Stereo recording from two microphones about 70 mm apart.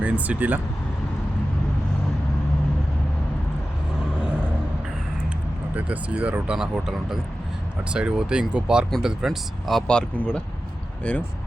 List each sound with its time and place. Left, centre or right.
0.0 s speech: right
5.7 s speech: right
6.6 s speech: centre
9.8 s speech: centre